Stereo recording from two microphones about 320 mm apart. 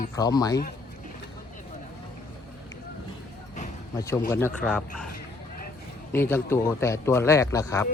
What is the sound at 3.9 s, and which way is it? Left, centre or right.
Speech, centre.